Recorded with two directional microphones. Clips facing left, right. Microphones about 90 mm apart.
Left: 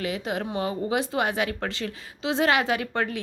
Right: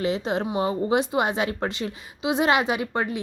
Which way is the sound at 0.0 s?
25° right (ahead or behind).